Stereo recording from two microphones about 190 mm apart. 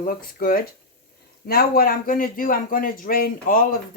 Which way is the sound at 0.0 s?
50° left (ahead or behind).